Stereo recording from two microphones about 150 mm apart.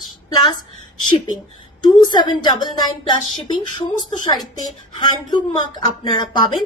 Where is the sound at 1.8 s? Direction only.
30° left (ahead or behind).